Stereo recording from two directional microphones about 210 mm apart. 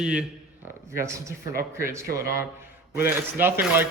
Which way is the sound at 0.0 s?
5° right (ahead or behind).